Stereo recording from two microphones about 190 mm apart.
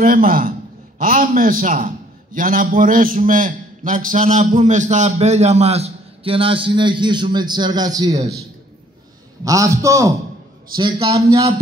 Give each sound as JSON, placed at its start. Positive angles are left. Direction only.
{"t": 0.0, "sound": "a man's voice", "side_deg": -50}
{"t": 9.4, "sound": "a man's voice", "side_deg": -15}
{"t": 10.8, "sound": "a man's voice", "side_deg": -30}